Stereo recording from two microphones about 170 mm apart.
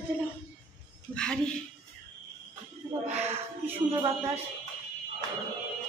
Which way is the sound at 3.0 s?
40° right (ahead or behind).